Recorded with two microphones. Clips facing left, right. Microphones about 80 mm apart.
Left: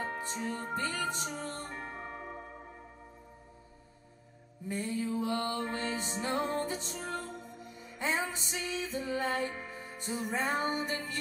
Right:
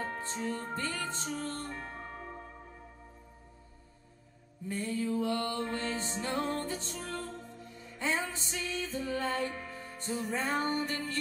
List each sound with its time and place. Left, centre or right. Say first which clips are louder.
0.0 s music: even; centre
4.6 s music: right 1 dB; centre